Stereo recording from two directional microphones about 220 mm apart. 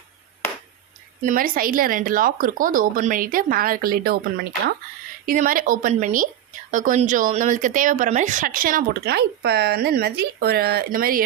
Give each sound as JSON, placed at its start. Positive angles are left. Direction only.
{"t": 1.2, "sound": "speech", "side_deg": -35}